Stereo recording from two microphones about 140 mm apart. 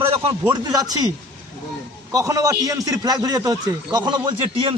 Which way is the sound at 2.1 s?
25° right (ahead or behind).